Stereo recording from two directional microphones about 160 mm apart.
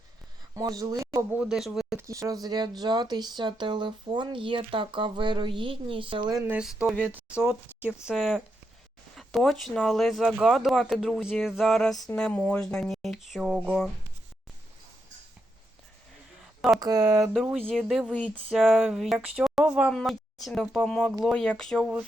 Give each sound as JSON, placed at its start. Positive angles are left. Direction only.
{"t": 0.5, "sound": "speech", "side_deg": -20}
{"t": 1.4, "sound": "speech", "side_deg": 0}
{"t": 2.0, "sound": "speech", "side_deg": -20}
{"t": 6.4, "sound": "speech", "side_deg": -5}
{"t": 16.6, "sound": "a sound", "side_deg": 0}
{"t": 16.8, "sound": "speech", "side_deg": -25}
{"t": 17.3, "sound": "speech", "side_deg": 0}